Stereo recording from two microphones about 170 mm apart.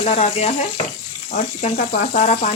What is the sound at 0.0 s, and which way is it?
Speech, 40° left (ahead or behind).